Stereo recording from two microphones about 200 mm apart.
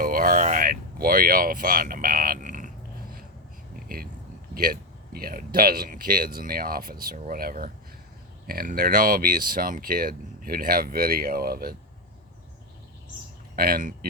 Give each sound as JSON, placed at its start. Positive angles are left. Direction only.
{"t": 0.0, "sound": "a sound", "side_deg": -45}
{"t": 3.8, "sound": "speech", "side_deg": -45}
{"t": 13.6, "sound": "speech", "side_deg": -45}